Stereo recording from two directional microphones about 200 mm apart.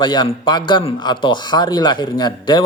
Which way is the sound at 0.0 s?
20° left (ahead or behind).